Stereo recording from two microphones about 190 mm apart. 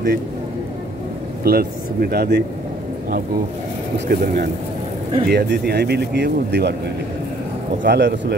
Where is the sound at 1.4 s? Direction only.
55° right (ahead or behind).